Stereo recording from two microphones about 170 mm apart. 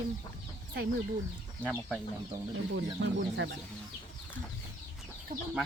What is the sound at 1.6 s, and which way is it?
Speech, 10° right (ahead or behind).